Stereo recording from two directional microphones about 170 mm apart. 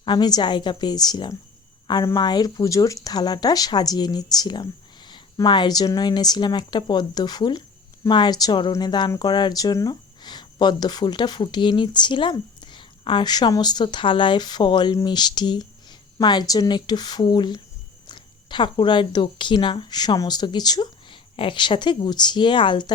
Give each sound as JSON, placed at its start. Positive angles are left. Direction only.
{"t": 0.0, "sound": "speech", "side_deg": 25}